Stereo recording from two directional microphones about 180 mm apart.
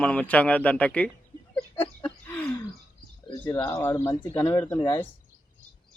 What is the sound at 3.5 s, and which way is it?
Speech, 20° left (ahead or behind).